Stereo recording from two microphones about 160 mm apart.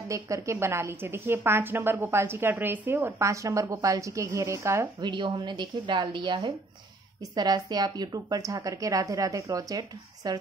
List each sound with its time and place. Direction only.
0.1 s a woman's voice: 20° right (ahead or behind)